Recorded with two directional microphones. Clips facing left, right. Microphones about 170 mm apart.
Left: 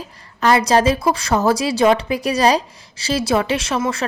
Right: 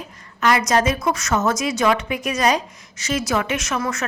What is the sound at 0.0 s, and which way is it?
A woman's voice, 30° left (ahead or behind).